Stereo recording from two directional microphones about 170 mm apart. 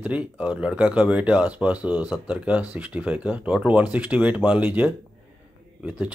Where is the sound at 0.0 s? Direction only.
5° right (ahead or behind).